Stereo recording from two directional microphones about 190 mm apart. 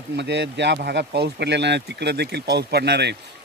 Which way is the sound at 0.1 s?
65° right (ahead or behind).